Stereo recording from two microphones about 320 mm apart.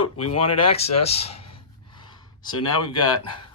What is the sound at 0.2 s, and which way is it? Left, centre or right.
Speech, left.